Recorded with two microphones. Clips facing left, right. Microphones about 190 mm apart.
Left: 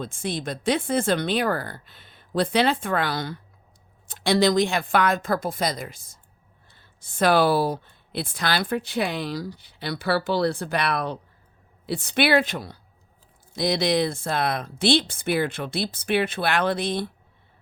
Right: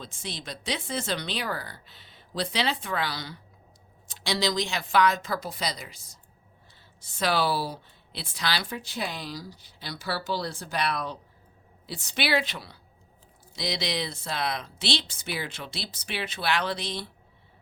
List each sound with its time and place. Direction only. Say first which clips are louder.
0.0 s speech: left 10 dB; 50° left (ahead or behind)